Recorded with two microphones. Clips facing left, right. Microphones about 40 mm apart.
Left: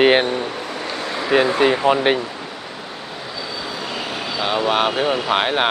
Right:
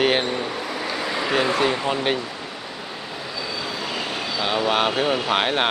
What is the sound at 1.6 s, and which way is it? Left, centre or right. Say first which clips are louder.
Speech: left 6 dB; centre.